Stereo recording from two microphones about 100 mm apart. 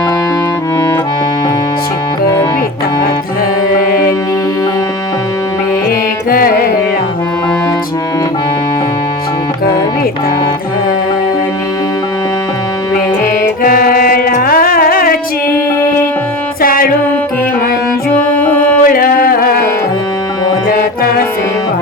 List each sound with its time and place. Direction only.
15.5 s music: 20° left (ahead or behind)
18.2 s music: 15° left (ahead or behind)